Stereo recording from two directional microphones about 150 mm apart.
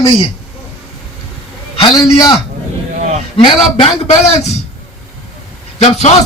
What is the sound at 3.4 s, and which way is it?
Speech, 35° left (ahead or behind).